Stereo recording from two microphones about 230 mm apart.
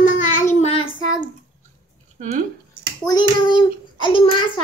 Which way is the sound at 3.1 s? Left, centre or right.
Centre.